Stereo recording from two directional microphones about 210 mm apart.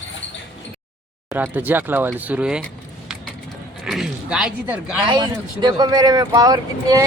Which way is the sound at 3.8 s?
Centre (ahead or behind).